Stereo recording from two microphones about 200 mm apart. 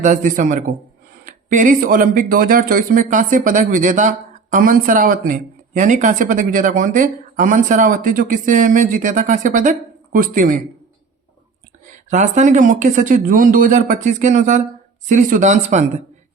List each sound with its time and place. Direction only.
0.0 s speech: 40° right (ahead or behind)
12.1 s speech: 35° right (ahead or behind)